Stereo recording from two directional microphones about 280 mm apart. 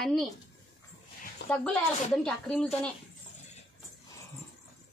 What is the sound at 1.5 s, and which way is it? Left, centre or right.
Speech, centre.